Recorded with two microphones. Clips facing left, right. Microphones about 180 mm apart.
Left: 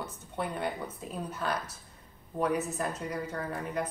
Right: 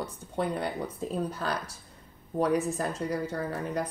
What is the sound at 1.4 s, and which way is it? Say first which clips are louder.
Speech: left 3 dB; 35° right (ahead or behind).